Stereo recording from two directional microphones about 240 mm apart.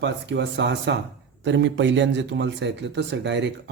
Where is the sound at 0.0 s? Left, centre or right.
Right.